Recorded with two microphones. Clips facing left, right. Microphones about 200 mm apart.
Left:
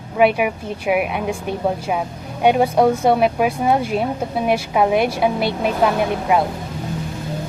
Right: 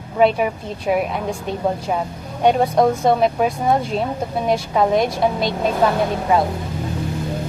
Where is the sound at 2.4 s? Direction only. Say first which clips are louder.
Left 1 dB; 10° left (ahead or behind).